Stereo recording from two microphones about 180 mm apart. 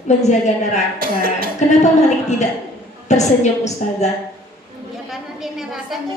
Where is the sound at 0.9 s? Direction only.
55° right (ahead or behind).